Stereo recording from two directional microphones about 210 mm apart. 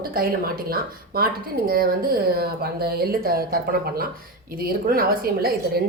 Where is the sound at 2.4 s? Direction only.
50° right (ahead or behind).